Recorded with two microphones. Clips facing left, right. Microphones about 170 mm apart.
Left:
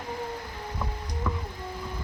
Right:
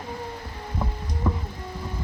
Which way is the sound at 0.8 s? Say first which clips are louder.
Right 4 dB; 30° right (ahead or behind).